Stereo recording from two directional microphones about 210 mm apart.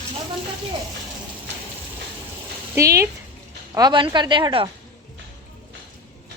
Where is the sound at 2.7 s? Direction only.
15° right (ahead or behind).